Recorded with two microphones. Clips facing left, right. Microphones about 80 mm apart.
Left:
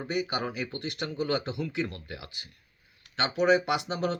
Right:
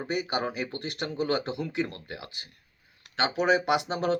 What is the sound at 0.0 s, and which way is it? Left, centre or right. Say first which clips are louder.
Speech: right 1 dB; right.